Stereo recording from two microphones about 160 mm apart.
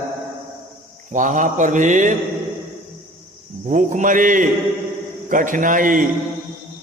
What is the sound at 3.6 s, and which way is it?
Mantra, 55° right (ahead or behind).